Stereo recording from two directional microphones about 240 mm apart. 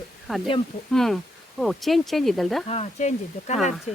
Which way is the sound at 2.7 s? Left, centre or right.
Left.